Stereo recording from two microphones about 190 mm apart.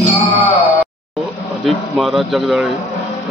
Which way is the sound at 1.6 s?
Centre (ahead or behind).